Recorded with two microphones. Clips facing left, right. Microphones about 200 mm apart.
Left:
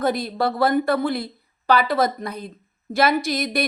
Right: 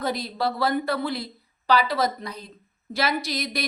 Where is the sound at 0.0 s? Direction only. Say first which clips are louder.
Left 5 dB; 50° left (ahead or behind).